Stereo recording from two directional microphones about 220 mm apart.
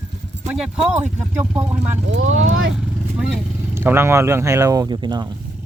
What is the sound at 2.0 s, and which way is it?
Speech, 60° right (ahead or behind).